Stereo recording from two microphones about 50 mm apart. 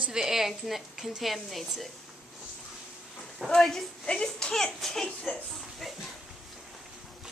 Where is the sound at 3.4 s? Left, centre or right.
Centre.